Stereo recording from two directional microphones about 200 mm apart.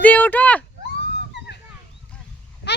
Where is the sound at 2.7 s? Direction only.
55° left (ahead or behind).